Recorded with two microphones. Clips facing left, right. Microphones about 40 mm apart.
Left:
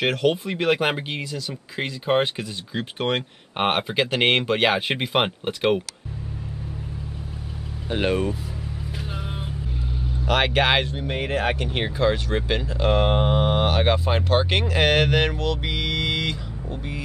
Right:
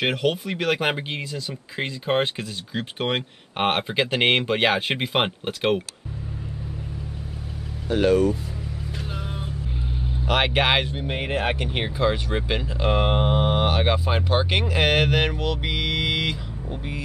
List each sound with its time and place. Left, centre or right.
0.0 s speech: centre
0.3 s speech: centre
7.9 s speech: left
10.2 s speech: centre